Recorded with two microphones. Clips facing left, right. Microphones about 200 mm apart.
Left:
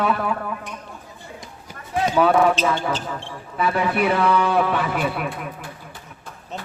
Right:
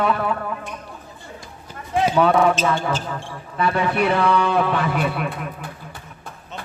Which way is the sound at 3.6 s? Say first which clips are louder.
Right 1 dB; 5° left (ahead or behind).